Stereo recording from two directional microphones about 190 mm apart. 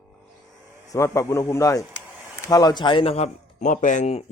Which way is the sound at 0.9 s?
15° left (ahead or behind).